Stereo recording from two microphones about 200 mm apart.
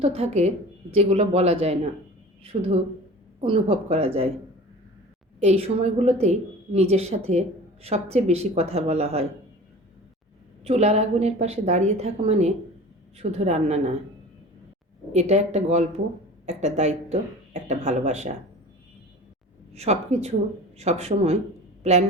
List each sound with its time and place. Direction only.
0.0 s a woman's voice: 30° right (ahead or behind)
5.4 s a woman's voice: 30° right (ahead or behind)
10.6 s a woman's voice: 30° right (ahead or behind)
15.1 s a woman's voice: 35° right (ahead or behind)
19.7 s a woman's voice: 35° right (ahead or behind)